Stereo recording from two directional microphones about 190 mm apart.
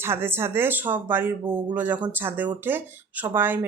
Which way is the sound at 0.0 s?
10° right (ahead or behind).